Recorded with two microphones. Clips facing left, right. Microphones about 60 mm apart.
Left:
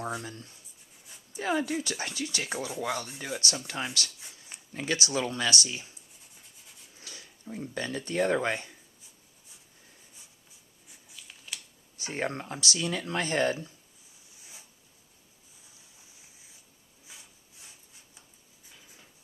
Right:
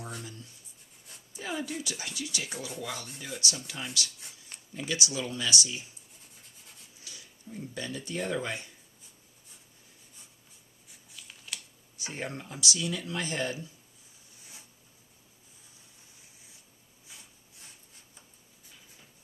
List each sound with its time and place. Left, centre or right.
0.2 s speech: left
6.4 s rub: centre
7.0 s speech: left
10.8 s a sound: centre
11.9 s speech: left